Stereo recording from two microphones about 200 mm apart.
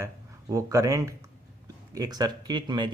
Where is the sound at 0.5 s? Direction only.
15° right (ahead or behind).